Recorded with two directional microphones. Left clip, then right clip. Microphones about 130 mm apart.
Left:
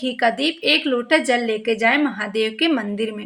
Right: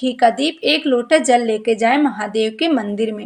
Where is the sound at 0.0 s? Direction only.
35° right (ahead or behind).